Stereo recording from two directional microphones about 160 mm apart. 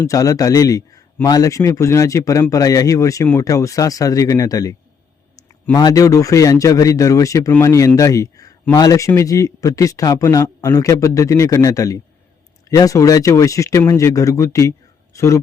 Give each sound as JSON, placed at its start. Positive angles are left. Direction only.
{"t": 0.0, "sound": "a man's voice", "side_deg": 20}